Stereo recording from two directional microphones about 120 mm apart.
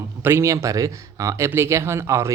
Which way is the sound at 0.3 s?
25° right (ahead or behind).